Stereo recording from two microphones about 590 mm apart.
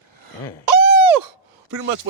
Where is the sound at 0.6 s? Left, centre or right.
Right.